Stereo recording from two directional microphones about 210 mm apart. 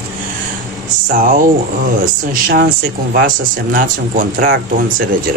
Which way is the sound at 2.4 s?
45° right (ahead or behind).